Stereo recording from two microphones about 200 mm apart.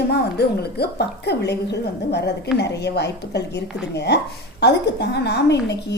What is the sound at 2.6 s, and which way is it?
A woman's voice, 55° left (ahead or behind).